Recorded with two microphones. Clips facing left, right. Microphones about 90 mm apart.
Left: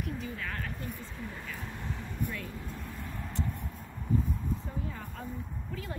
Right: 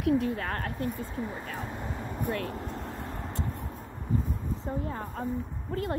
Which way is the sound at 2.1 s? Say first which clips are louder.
Right 7 dB; 60° right (ahead or behind).